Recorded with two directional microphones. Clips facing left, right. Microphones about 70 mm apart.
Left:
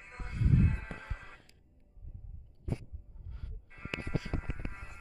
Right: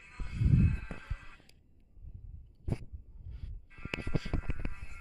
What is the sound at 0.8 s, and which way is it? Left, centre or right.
Music, left.